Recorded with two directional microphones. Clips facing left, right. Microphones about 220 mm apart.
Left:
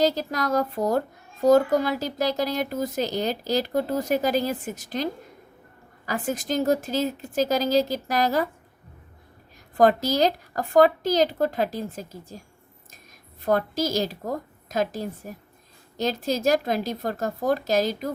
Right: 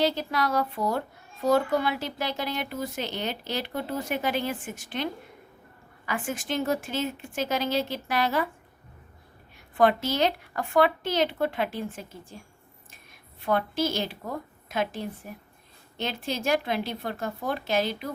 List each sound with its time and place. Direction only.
0.0 s a child's voice: 40° left (ahead or behind)
6.1 s a child's voice: 40° left (ahead or behind)
9.7 s a child's voice: 40° left (ahead or behind)
13.4 s a child's voice: 40° left (ahead or behind)